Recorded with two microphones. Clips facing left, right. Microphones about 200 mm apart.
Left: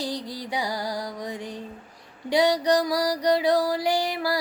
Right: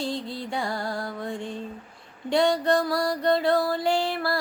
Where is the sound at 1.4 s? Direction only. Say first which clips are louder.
Right 2 dB; 25° right (ahead or behind).